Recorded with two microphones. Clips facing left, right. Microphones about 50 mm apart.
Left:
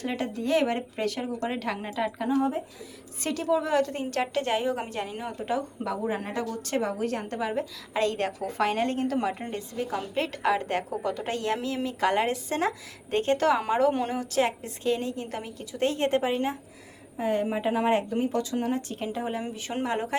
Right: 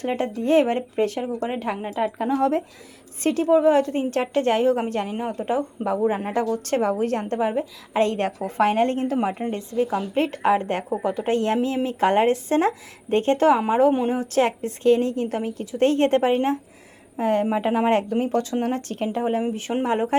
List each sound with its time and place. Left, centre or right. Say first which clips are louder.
0.0 s a woman's voice: right 6 dB; right
2.3 s speech: right 5 dB; right
3.2 s a woman's voice: right 9 dB; right
7.3 s a woman's voice: right 6 dB; right
14.2 s a woman's voice: right 5 dB; right
19.0 s a woman's voice: right 11 dB; right